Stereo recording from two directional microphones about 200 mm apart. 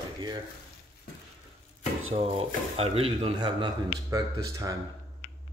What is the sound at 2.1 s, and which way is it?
Speech, 30° right (ahead or behind).